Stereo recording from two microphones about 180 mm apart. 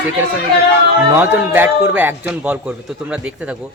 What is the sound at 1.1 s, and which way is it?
A man's voice, 10° right (ahead or behind).